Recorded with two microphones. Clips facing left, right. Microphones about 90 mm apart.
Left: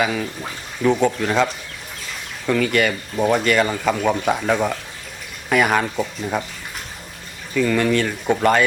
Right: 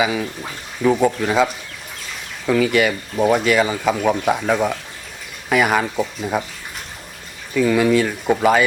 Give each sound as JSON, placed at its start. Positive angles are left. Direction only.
{"t": 0.0, "sound": "speech", "side_deg": -5}
{"t": 2.5, "sound": "speech", "side_deg": -5}
{"t": 7.5, "sound": "speech", "side_deg": -5}